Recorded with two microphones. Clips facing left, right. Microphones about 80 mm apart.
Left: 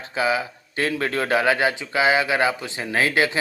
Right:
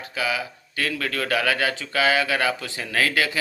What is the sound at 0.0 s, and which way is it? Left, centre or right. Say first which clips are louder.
A man's voice: left 4 dB; left.